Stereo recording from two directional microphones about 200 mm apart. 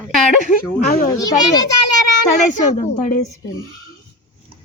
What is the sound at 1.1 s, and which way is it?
Speech, 15° left (ahead or behind).